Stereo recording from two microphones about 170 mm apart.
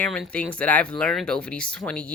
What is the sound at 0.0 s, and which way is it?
Speech, 5° left (ahead or behind).